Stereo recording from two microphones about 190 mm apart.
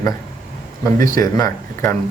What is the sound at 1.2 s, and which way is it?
Speech, 15° left (ahead or behind).